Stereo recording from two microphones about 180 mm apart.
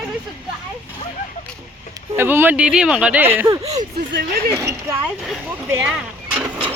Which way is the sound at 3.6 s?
35° right (ahead or behind).